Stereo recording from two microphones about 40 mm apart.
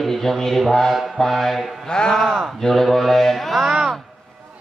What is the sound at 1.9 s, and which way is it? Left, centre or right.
Speech, centre.